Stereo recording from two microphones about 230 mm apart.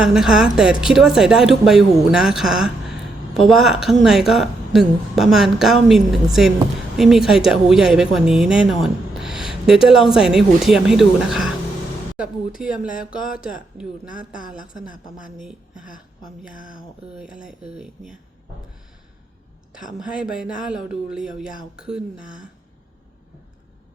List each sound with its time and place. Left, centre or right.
0.0 s speech: centre
12.5 s speech: centre
15.4 s a woman's voice: centre
16.6 s speech: left
17.2 s speech: centre
20.4 s speech: centre